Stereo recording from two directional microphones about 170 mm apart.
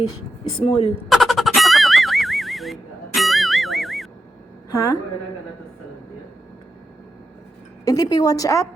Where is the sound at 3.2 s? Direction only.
Centre (ahead or behind).